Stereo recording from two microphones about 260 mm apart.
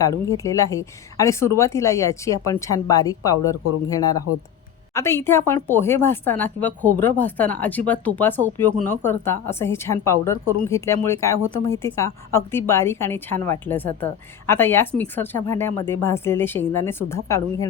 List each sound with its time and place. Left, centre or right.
0.0 s speech: centre